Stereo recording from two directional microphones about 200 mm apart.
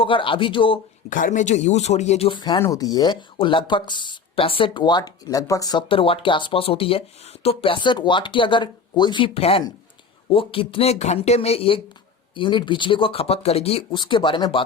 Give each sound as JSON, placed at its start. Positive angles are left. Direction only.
{"t": 0.0, "sound": "speech", "side_deg": 25}
{"t": 1.1, "sound": "speech", "side_deg": 40}